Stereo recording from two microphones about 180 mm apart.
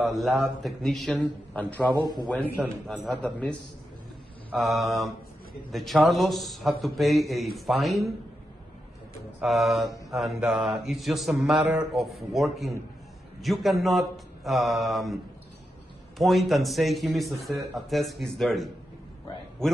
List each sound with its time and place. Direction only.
0.0 s mantra: centre (ahead or behind)
2.9 s mantra: 5° left (ahead or behind)
9.4 s mantra: centre (ahead or behind)
16.2 s mantra: centre (ahead or behind)